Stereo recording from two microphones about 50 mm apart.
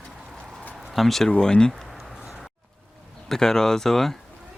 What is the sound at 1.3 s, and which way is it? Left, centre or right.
Speech, centre.